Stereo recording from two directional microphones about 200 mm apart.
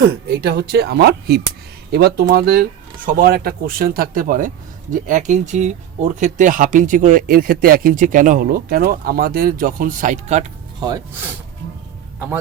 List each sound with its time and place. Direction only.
0.3 s speech: 55° right (ahead or behind); by 10.4 s 35° right (ahead or behind)
10.8 s speech: 20° right (ahead or behind)